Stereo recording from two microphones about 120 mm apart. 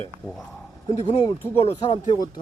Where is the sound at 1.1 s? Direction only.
55° left (ahead or behind).